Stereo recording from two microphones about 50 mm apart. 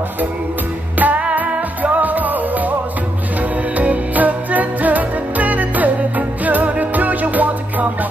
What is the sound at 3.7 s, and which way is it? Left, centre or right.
Music, right.